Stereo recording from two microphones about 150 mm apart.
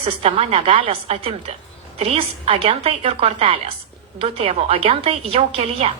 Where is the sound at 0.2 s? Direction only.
40° right (ahead or behind).